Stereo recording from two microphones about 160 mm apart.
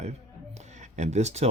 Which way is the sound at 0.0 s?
45° right (ahead or behind).